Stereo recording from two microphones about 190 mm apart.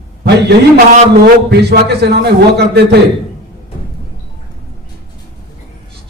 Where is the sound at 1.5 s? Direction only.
60° right (ahead or behind).